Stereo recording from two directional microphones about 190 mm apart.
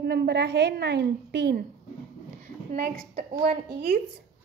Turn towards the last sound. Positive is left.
turn(degrees=-50)  # may be behind; listen again after turning